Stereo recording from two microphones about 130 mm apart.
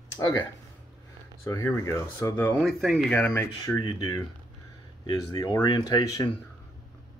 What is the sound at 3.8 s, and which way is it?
Speech, 30° left (ahead or behind).